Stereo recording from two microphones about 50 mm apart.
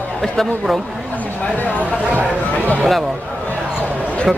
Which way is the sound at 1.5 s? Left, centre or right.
Left.